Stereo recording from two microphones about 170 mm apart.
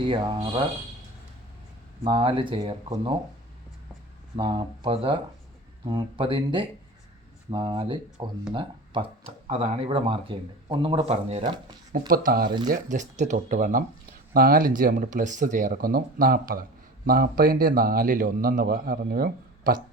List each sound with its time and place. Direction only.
0.0 s speech: 30° right (ahead or behind)
2.0 s speech: 30° right (ahead or behind)
4.4 s speech: 30° right (ahead or behind)
11.9 s speech: 55° right (ahead or behind)
12.7 s speech: 45° right (ahead or behind)